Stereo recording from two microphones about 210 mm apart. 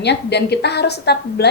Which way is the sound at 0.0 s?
55° left (ahead or behind).